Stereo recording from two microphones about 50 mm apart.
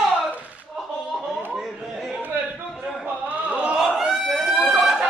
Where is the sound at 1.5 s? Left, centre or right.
Centre.